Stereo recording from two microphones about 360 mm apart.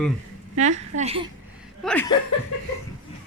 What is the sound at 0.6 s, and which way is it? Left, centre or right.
Speech, centre.